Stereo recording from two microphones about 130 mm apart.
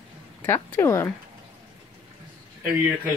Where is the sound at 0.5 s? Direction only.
20° left (ahead or behind).